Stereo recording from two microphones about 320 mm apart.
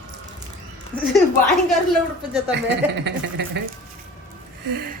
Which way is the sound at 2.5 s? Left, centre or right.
Right.